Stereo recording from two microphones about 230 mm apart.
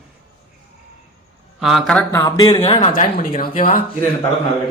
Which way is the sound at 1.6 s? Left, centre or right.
Centre.